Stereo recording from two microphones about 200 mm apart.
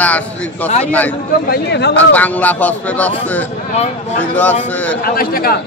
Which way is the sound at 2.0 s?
10° left (ahead or behind).